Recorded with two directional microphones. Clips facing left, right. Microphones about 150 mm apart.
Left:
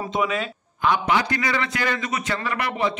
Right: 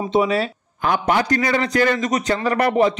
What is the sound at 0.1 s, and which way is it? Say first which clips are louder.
A man's voice: right 7 dB; 35° right (ahead or behind).